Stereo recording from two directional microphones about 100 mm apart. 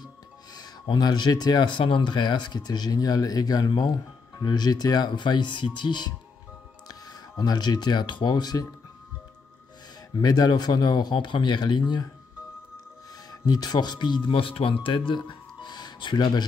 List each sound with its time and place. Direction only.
0.6 s speech: 45° left (ahead or behind)
10.2 s speech: 40° left (ahead or behind)
13.3 s speech: 40° left (ahead or behind)